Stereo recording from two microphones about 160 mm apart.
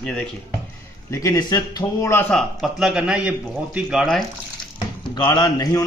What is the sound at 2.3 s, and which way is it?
A man's voice, centre (ahead or behind).